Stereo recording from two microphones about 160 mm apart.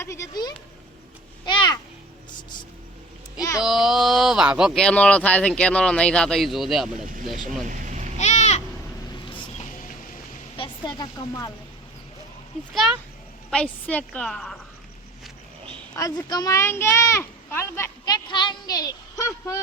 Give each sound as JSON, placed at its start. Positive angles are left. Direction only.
{"t": 0.0, "sound": "speech", "side_deg": 20}
{"t": 3.6, "sound": "speech", "side_deg": 0}
{"t": 7.7, "sound": "a sound", "side_deg": -50}
{"t": 8.2, "sound": "goat", "side_deg": 45}
{"t": 9.3, "sound": "a sound", "side_deg": 30}
{"t": 10.6, "sound": "speech", "side_deg": 25}
{"t": 12.7, "sound": "speech", "side_deg": 0}
{"t": 16.0, "sound": "speech", "side_deg": 25}